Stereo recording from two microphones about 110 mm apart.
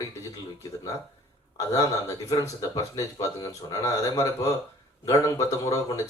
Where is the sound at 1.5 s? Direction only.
30° left (ahead or behind).